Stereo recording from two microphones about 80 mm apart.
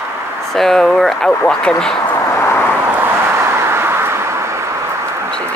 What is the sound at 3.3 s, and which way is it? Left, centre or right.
Vehicle, right.